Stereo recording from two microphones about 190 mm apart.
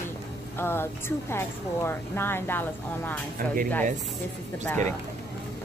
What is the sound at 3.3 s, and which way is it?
Speech, 45° right (ahead or behind).